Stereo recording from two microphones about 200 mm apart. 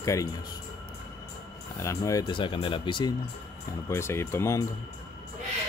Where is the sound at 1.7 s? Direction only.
15° left (ahead or behind).